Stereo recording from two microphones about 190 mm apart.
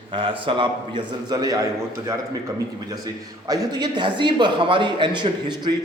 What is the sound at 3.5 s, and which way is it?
A man's voice, 20° right (ahead or behind).